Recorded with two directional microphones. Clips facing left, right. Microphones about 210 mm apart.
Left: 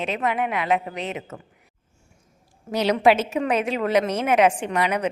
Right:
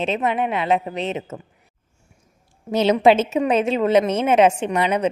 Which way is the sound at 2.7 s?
25° right (ahead or behind).